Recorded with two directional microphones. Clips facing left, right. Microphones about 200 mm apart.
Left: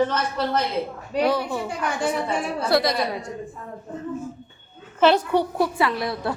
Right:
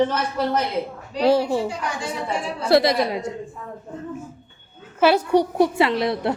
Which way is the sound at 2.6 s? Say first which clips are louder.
Right 5 dB; 25° right (ahead or behind).